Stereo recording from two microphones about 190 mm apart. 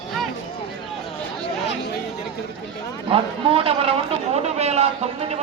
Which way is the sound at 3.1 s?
30° right (ahead or behind).